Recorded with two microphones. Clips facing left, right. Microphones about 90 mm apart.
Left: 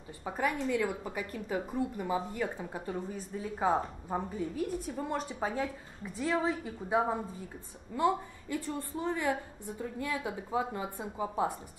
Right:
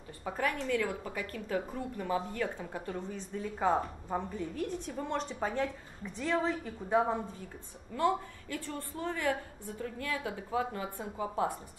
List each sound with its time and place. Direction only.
0.2 s a woman's voice: 15° left (ahead or behind)